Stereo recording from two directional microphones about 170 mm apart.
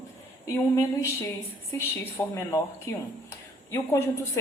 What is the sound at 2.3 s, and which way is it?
Speech, 15° left (ahead or behind).